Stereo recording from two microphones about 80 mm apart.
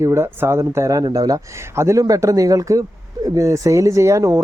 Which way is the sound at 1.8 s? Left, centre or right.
Right.